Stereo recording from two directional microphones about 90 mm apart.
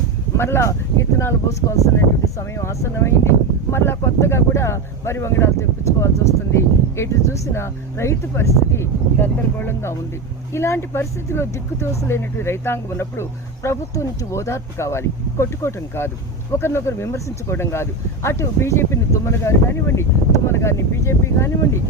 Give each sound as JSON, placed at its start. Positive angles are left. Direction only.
{"t": 0.3, "sound": "speech", "side_deg": 25}